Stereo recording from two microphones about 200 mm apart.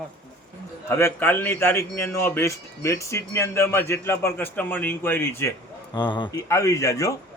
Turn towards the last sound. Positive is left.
turn(degrees=15)  # may be behind; listen again after turning